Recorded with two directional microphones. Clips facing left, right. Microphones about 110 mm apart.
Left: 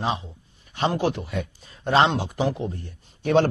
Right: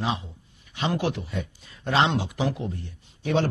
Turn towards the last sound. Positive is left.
turn(degrees=50)  # may be behind; listen again after turning